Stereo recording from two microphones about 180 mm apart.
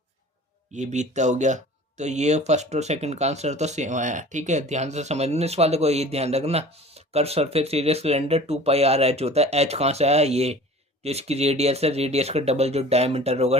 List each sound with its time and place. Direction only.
0.7 s speech: 40° right (ahead or behind)